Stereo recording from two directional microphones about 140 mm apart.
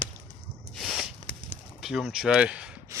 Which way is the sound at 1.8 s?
5° right (ahead or behind).